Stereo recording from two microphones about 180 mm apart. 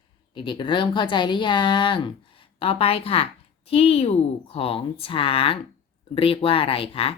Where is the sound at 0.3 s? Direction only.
25° left (ahead or behind).